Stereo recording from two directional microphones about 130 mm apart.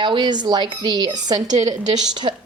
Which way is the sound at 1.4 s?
65° right (ahead or behind).